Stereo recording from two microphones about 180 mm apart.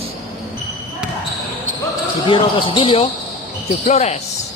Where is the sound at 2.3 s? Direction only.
30° left (ahead or behind).